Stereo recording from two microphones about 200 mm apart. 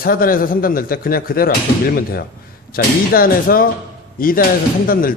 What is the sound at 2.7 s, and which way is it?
A man's voice, 45° left (ahead or behind).